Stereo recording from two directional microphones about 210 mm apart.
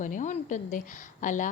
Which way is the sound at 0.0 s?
35° left (ahead or behind).